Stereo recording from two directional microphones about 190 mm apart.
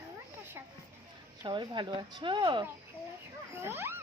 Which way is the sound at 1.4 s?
25° right (ahead or behind).